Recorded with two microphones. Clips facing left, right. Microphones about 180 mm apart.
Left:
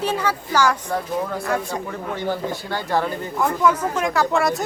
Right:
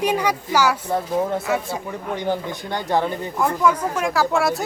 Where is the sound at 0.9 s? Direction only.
25° right (ahead or behind).